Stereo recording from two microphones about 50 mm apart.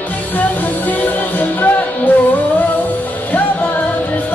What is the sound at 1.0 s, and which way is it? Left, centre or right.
Music, left.